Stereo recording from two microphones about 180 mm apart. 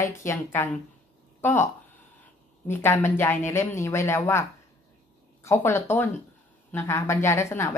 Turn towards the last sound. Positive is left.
turn(degrees=15)  # may be behind; listen again after turning